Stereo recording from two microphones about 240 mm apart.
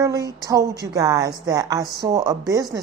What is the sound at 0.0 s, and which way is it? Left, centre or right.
A woman's voice, centre.